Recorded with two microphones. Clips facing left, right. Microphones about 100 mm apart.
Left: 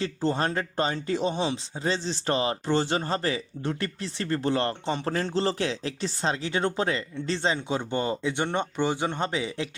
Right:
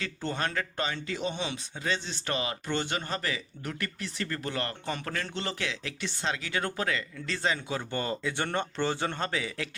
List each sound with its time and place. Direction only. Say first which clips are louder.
0.0 s speech: left 6 dB; 30° left (ahead or behind)